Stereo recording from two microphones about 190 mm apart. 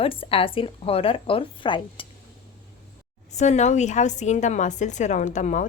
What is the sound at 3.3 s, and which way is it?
A woman's voice, 35° left (ahead or behind).